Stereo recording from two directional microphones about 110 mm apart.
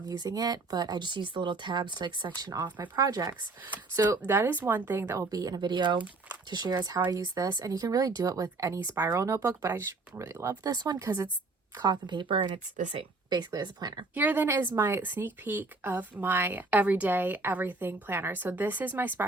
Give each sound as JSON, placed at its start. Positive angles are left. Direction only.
{"t": 0.1, "sound": "speech", "side_deg": -35}
{"t": 4.2, "sound": "speech", "side_deg": -20}
{"t": 10.5, "sound": "speech", "side_deg": -35}
{"t": 11.8, "sound": "a woman's voice", "side_deg": -40}
{"t": 12.8, "sound": "speech", "side_deg": -70}
{"t": 13.3, "sound": "speech", "side_deg": -40}
{"t": 14.2, "sound": "speech", "side_deg": -15}